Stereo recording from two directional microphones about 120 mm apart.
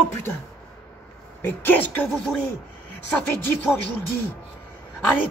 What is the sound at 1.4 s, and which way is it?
Speech, 15° left (ahead or behind).